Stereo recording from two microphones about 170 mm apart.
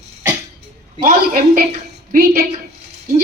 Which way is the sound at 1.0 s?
50° right (ahead or behind).